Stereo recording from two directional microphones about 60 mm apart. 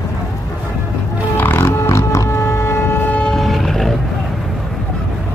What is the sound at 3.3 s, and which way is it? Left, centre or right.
Vehicle, centre.